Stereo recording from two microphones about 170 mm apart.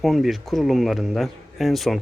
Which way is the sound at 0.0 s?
Centre (ahead or behind).